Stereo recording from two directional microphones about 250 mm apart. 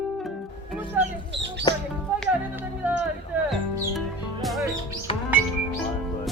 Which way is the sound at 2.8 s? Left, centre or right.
Centre.